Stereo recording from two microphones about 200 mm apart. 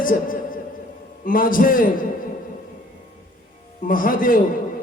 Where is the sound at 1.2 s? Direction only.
45° left (ahead or behind).